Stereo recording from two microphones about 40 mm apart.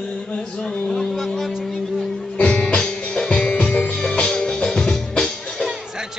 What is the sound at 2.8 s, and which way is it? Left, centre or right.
Music, centre.